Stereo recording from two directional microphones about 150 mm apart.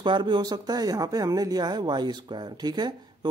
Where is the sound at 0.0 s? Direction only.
30° right (ahead or behind).